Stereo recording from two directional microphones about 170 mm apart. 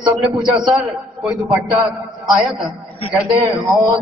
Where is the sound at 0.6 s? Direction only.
Centre (ahead or behind).